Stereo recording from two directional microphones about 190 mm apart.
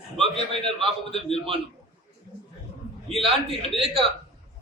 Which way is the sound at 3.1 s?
30° right (ahead or behind).